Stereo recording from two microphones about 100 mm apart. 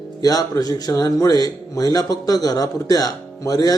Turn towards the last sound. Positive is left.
turn(degrees=40)  # may be behind; listen again after turning